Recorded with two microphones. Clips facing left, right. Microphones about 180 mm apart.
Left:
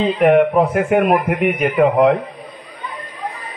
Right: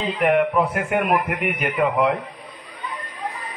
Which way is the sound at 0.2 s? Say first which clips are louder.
Left 5 dB; 45° left (ahead or behind).